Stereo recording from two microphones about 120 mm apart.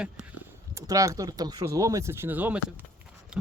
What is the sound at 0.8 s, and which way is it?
Speech, 30° right (ahead or behind).